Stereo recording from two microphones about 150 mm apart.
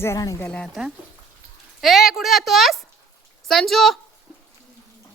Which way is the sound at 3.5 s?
Centre (ahead or behind).